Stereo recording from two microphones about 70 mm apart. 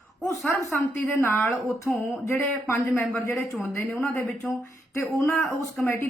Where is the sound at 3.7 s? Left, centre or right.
Left.